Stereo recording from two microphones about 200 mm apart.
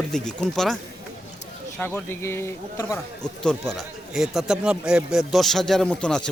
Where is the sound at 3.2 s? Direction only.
5° left (ahead or behind).